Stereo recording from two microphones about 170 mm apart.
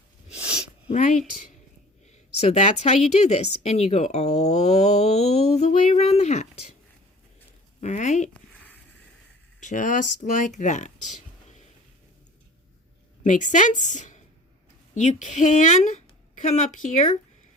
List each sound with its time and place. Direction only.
0.9 s a woman's voice: 45° left (ahead or behind)
7.8 s speech: 45° left (ahead or behind)
8.3 s a sound: 10° left (ahead or behind)
9.6 s speech: 50° left (ahead or behind)
13.2 s a woman's voice: 50° left (ahead or behind)